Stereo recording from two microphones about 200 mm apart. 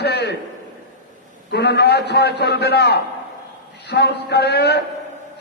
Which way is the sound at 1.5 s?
55° left (ahead or behind).